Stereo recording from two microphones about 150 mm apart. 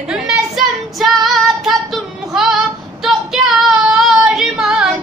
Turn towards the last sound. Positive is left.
turn(degrees=-5)  # may be behind; listen again after turning